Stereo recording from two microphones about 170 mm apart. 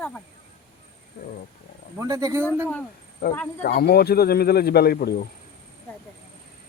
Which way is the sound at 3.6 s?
60° left (ahead or behind).